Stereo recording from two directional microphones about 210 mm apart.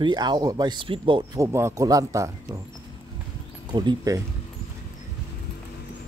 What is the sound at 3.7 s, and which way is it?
Speech, 20° right (ahead or behind).